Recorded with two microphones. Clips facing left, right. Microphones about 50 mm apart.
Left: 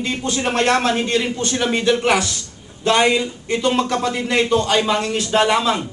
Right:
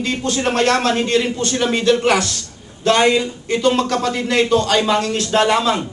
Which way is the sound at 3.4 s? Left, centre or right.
Centre.